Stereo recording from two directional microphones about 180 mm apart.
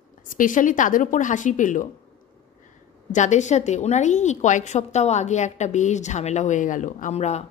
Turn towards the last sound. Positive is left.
turn(degrees=40)  # may be behind; listen again after turning